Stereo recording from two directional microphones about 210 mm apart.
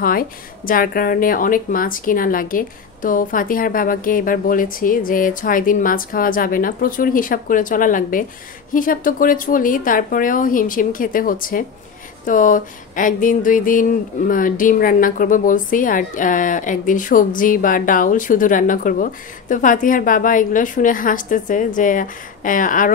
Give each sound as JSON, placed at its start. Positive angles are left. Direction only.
{"t": 0.0, "sound": "speech", "side_deg": 45}